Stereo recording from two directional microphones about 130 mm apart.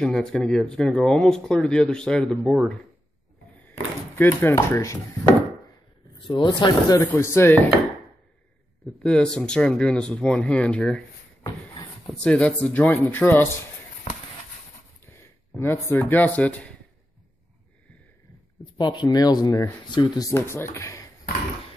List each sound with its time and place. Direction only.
0.0 s speech: 5° left (ahead or behind)
4.2 s speech: 20° left (ahead or behind)
6.2 s speech: 40° left (ahead or behind)
7.0 s speech: 20° left (ahead or behind)
9.0 s speech: 5° left (ahead or behind)
12.1 s speech: 10° left (ahead or behind)
15.9 s speech: 15° left (ahead or behind)
18.6 s speech: 35° left (ahead or behind)